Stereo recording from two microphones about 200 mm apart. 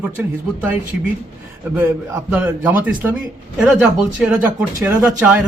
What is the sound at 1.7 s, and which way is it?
A man's voice, 10° right (ahead or behind).